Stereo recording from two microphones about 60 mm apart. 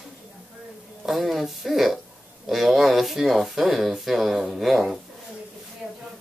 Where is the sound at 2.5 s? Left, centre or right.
Centre.